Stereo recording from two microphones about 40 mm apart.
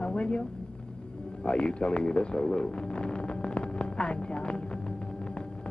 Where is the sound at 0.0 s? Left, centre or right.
Left.